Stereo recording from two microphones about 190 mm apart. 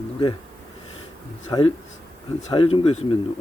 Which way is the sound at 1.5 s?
20° left (ahead or behind).